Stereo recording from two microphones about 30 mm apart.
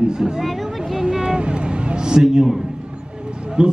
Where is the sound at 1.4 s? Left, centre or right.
Right; by 2.6 s centre.